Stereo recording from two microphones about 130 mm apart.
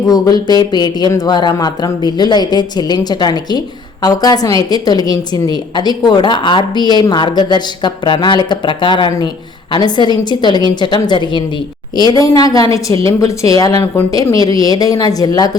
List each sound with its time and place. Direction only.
0.1 s a woman's voice: 30° left (ahead or behind)